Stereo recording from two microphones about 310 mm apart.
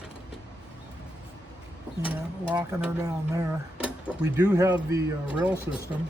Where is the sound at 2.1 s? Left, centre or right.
Centre.